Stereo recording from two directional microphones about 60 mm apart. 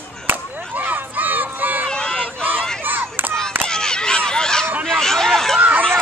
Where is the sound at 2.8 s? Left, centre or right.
Right.